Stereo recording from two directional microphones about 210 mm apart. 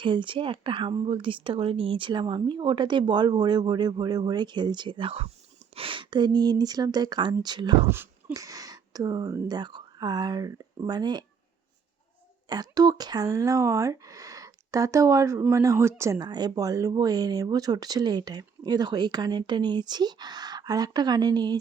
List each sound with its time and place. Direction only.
0.0 s speech: 25° right (ahead or behind)
12.5 s speech: 20° right (ahead or behind)